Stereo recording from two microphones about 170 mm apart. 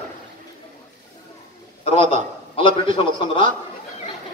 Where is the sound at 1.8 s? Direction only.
35° left (ahead or behind).